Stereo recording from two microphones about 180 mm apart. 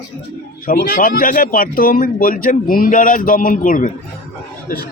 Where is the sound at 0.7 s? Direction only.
50° left (ahead or behind).